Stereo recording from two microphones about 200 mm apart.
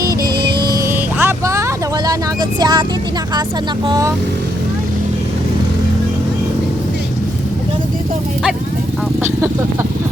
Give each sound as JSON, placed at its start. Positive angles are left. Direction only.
{"t": 0.0, "sound": "music", "side_deg": -20}
{"t": 1.2, "sound": "vehicle", "side_deg": -15}
{"t": 3.8, "sound": "speech", "side_deg": -20}